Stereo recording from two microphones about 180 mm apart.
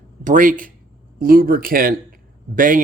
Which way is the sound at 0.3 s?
50° right (ahead or behind).